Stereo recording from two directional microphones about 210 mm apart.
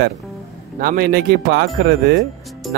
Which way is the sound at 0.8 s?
45° right (ahead or behind).